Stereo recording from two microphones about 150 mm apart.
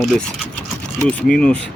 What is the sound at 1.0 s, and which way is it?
Speech, 5° left (ahead or behind).